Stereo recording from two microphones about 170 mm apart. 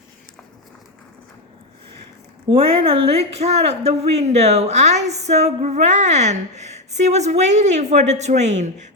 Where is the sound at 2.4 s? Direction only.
35° right (ahead or behind).